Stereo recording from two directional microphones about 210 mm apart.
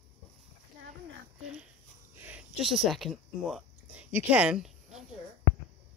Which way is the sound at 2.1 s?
10° right (ahead or behind).